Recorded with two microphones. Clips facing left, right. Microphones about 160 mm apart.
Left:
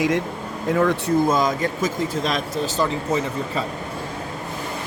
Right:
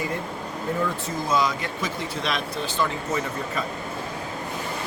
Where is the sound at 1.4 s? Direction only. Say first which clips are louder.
Left 4 dB; 45° left (ahead or behind).